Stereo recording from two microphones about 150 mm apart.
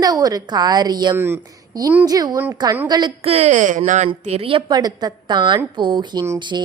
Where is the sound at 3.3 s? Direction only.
50° right (ahead or behind).